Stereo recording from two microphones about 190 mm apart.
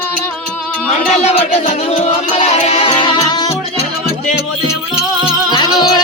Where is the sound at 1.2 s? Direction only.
35° left (ahead or behind).